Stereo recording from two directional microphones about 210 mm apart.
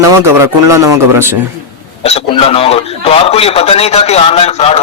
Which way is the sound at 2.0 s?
30° left (ahead or behind).